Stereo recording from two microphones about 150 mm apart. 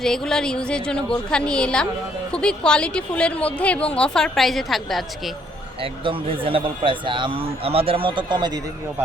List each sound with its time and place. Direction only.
0.0 s a woman's voice: 5° left (ahead or behind)
5.8 s speech: 40° right (ahead or behind)